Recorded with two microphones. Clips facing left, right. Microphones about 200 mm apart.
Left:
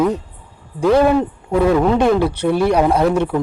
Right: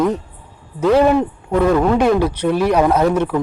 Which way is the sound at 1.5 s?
5° left (ahead or behind).